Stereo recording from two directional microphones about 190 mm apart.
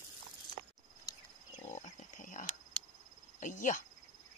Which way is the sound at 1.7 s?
45° left (ahead or behind).